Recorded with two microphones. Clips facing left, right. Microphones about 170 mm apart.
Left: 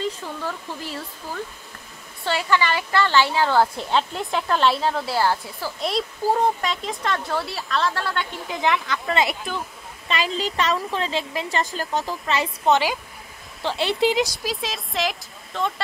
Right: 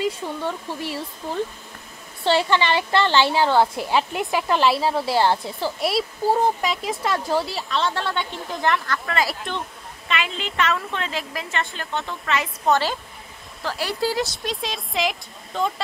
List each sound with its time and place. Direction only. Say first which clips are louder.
0.2 s a woman's voice: right 3 dB; 20° right (ahead or behind)
2.2 s a woman's voice: right 3 dB; 25° right (ahead or behind); by 5.0 s 5° right (ahead or behind)
5.0 s a woman's voice: right 2 dB; 20° right (ahead or behind)
5.8 s speech: even; 5° right (ahead or behind)
8.9 s speech: left 2 dB; 25° left (ahead or behind)
9.4 s speech: even; 5° left (ahead or behind)
10.0 s a woman's voice: left 2 dB; 35° left (ahead or behind)
12.7 s speech: left 1 dB; 15° left (ahead or behind)
14.2 s speech: left 1 dB; centre (ahead or behind)